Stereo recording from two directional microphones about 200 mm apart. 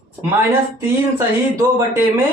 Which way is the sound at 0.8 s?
15° right (ahead or behind).